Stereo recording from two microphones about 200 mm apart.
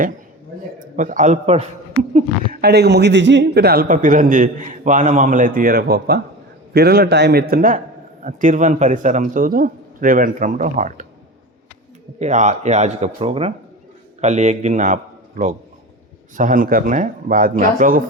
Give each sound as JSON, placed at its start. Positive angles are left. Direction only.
{"t": 0.8, "sound": "a man's voice", "side_deg": -40}
{"t": 2.1, "sound": "a woman's voice", "side_deg": -50}
{"t": 12.2, "sound": "a man's voice", "side_deg": -35}
{"t": 16.3, "sound": "a woman's voice", "side_deg": -40}